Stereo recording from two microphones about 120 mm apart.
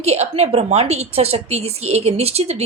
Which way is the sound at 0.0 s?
60° right (ahead or behind).